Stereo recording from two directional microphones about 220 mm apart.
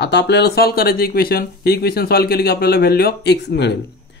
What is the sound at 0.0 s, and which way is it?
Speech, 50° left (ahead or behind).